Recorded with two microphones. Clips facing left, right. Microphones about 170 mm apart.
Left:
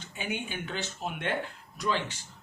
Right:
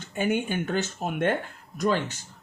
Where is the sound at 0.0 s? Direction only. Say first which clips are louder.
Right 9 dB; 50° right (ahead or behind).